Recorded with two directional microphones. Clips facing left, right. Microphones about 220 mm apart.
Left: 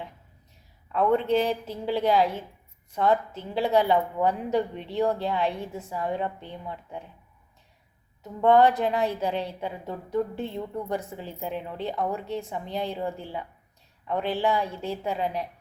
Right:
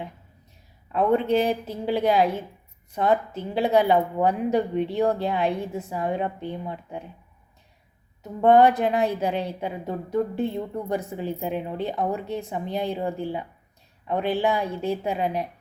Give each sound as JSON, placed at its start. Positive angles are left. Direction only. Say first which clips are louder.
{"t": 0.9, "sound": "a woman's voice", "louder": "right 2 dB", "side_deg": -15}
{"t": 8.4, "sound": "a woman's voice", "louder": "right 3 dB", "side_deg": -15}